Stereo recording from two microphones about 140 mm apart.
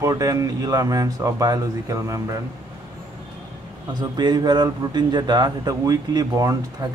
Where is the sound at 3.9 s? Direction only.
30° right (ahead or behind).